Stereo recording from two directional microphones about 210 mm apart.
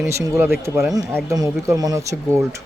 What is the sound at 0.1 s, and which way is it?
Speech, 15° right (ahead or behind).